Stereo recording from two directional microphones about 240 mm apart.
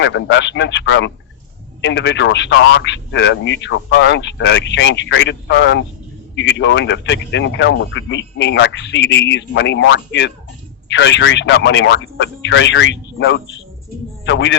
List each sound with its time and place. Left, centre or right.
0.0 s speech: left